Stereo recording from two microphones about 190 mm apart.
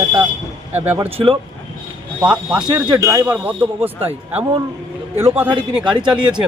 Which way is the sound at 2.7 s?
20° right (ahead or behind).